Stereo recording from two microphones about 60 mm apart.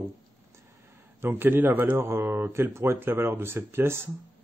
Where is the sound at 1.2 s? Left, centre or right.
Right.